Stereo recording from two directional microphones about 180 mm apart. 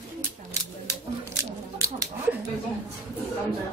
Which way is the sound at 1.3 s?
15° right (ahead or behind).